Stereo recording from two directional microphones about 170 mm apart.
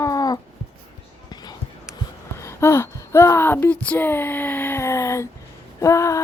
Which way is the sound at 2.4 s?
15° left (ahead or behind).